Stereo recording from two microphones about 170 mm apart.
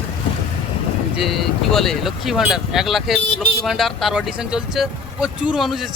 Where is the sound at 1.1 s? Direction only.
Centre (ahead or behind).